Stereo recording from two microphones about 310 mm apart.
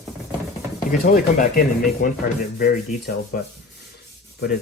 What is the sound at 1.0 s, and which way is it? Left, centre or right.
Speech, left.